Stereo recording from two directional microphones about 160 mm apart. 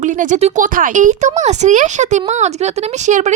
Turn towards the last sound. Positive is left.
turn(degrees=-50)  # may be behind; listen again after turning